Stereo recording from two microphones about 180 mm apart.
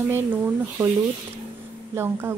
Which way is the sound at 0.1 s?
15° right (ahead or behind).